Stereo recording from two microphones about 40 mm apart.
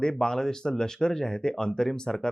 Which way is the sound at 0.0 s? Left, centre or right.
Centre.